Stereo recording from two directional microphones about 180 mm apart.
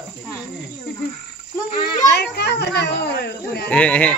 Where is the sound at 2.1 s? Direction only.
65° left (ahead or behind).